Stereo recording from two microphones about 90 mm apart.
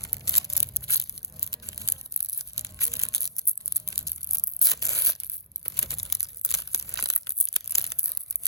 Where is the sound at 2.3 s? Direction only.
35° right (ahead or behind).